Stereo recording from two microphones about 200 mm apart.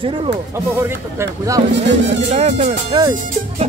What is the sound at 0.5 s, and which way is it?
Speech, 15° right (ahead or behind).